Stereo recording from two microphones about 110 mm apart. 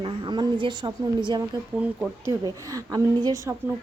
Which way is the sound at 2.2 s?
30° right (ahead or behind).